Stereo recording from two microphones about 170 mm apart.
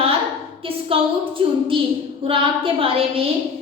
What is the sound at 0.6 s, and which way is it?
A woman's voice, 30° right (ahead or behind).